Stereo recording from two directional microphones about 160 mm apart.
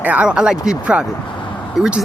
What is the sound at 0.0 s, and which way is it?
Speech, 10° right (ahead or behind).